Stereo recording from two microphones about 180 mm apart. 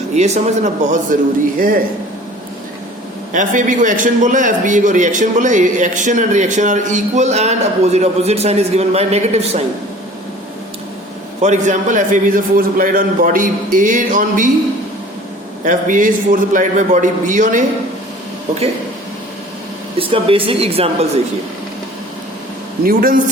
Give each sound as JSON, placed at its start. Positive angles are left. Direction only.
{"t": 0.1, "sound": "a man's voice", "side_deg": -40}
{"t": 3.3, "sound": "a man's voice", "side_deg": -45}
{"t": 11.3, "sound": "a man's voice", "side_deg": -40}
{"t": 15.6, "sound": "a man's voice", "side_deg": -50}
{"t": 20.0, "sound": "speech", "side_deg": -30}
{"t": 22.9, "sound": "a man's voice", "side_deg": -55}